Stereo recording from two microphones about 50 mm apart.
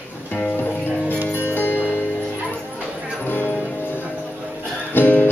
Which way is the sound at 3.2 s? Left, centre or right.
Left.